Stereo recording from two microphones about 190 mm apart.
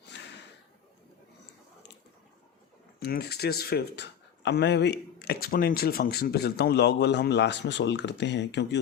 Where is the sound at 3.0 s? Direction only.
55° left (ahead or behind).